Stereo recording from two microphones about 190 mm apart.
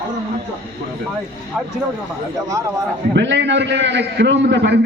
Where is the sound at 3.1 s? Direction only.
70° right (ahead or behind).